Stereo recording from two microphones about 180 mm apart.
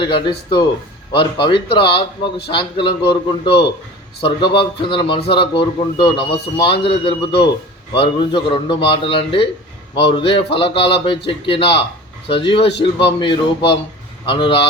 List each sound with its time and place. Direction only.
0.0 s speech: 25° left (ahead or behind)